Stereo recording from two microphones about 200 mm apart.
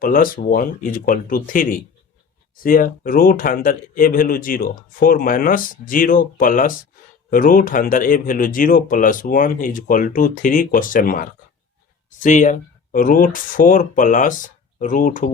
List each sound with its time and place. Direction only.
0.0 s speech: 45° left (ahead or behind)